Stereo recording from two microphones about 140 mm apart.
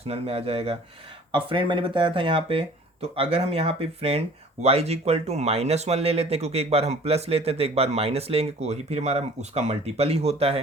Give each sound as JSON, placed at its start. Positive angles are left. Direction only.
{"t": 0.0, "sound": "speech", "side_deg": -45}